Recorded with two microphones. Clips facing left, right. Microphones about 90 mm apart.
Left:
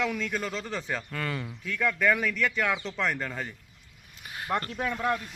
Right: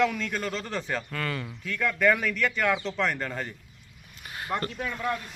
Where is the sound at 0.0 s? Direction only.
5° left (ahead or behind).